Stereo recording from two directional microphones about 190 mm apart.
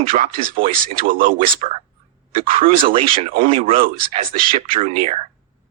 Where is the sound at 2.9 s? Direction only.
30° right (ahead or behind).